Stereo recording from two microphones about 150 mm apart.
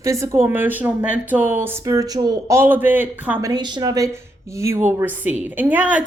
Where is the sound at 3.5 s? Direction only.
30° right (ahead or behind).